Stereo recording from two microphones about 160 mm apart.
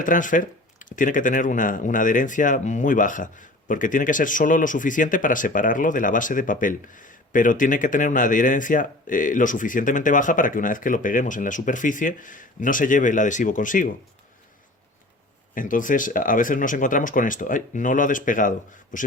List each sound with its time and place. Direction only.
0.0 s speech: 55° left (ahead or behind)
15.5 s speech: 55° left (ahead or behind)